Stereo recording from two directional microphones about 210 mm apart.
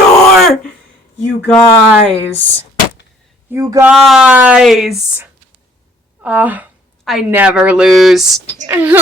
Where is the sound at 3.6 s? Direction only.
15° right (ahead or behind).